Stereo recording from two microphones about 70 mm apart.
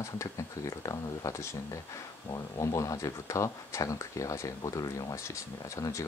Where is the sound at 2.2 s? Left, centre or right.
Left.